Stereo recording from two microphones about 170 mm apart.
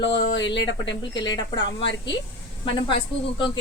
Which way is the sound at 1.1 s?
25° left (ahead or behind).